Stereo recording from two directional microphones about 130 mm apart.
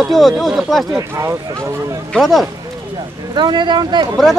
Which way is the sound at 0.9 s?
20° right (ahead or behind).